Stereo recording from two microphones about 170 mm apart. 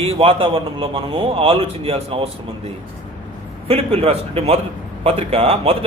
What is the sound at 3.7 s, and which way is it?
Speech, 35° right (ahead or behind).